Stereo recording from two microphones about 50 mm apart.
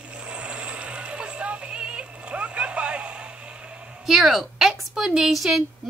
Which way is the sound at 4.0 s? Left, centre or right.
Centre.